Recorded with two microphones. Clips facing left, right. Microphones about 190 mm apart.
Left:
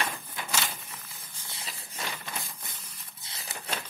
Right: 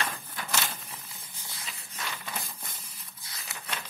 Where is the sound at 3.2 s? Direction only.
25° left (ahead or behind).